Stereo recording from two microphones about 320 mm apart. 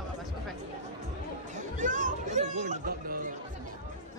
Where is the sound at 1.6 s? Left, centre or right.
Right.